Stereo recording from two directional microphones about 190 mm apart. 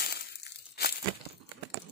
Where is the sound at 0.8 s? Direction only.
55° left (ahead or behind).